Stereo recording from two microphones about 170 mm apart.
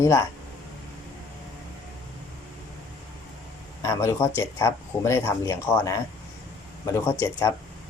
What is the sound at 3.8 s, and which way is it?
Speech, 15° left (ahead or behind).